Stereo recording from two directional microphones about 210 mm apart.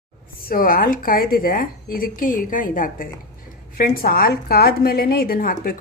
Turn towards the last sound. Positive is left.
turn(degrees=45)  # may be behind; listen again after turning